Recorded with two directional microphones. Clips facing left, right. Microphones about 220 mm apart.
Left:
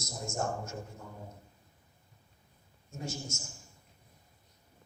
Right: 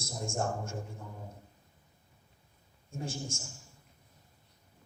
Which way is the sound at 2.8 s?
30° right (ahead or behind).